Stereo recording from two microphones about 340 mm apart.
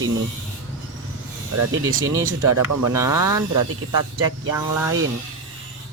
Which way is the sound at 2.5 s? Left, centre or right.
Right.